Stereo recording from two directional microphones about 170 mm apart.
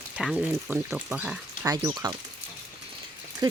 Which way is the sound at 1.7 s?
20° right (ahead or behind).